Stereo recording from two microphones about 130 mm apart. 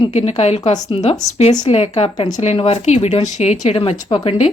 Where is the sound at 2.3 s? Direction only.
55° left (ahead or behind).